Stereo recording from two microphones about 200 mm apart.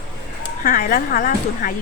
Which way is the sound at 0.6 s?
45° left (ahead or behind).